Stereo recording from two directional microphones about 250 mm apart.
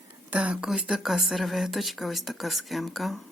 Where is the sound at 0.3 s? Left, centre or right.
Centre.